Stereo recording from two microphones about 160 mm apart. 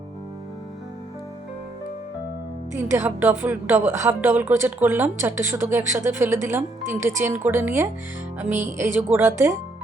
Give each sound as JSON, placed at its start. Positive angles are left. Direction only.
{"t": 2.7, "sound": "a woman's voice", "side_deg": -15}
{"t": 9.0, "sound": "a woman's voice", "side_deg": -15}